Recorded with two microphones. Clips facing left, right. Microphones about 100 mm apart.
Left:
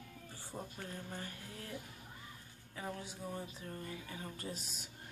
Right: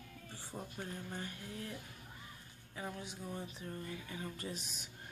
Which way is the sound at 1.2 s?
40° left (ahead or behind).